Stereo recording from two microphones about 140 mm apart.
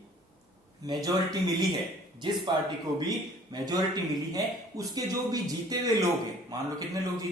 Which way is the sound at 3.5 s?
25° right (ahead or behind).